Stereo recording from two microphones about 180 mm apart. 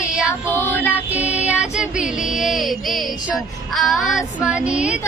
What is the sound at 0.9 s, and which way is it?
Child singing, 10° right (ahead or behind).